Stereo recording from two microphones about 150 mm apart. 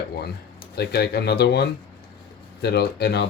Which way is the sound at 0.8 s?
90° left.